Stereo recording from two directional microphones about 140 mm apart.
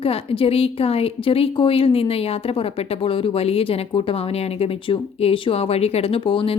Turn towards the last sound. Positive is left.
turn(degrees=35)  # may be behind; listen again after turning